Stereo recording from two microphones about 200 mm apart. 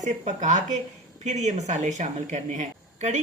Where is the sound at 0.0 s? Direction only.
40° right (ahead or behind).